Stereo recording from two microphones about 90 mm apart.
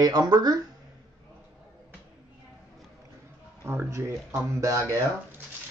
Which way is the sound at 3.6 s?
30° right (ahead or behind).